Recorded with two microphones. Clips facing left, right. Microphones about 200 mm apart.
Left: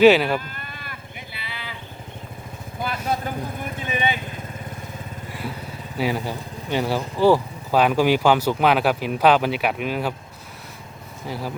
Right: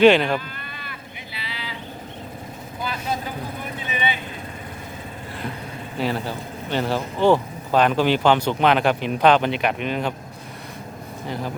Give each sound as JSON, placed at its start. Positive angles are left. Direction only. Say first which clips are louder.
{"t": 0.0, "sound": "speech", "louder": "even", "side_deg": 5}
{"t": 0.3, "sound": "a sound", "louder": "even", "side_deg": 50}
{"t": 2.8, "sound": "vehicle", "louder": "left 2 dB", "side_deg": 50}
{"t": 6.0, "sound": "speech", "louder": "left 1 dB", "side_deg": 10}
{"t": 11.3, "sound": "speech", "louder": "right 1 dB", "side_deg": 5}